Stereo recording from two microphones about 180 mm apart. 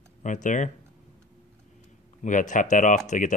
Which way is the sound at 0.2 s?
45° left (ahead or behind).